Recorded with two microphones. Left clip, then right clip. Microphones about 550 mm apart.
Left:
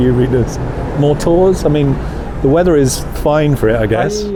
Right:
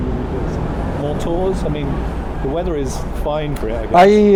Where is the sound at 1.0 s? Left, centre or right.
Left.